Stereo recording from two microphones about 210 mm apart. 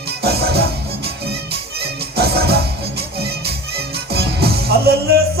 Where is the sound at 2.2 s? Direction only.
50° right (ahead or behind).